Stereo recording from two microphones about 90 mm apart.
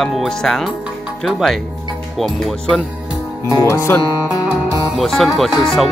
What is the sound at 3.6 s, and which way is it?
Speech, 30° left (ahead or behind).